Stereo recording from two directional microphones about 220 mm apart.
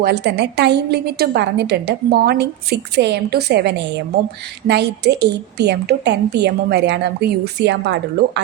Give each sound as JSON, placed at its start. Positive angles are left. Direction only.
{"t": 0.0, "sound": "a woman's voice", "side_deg": -50}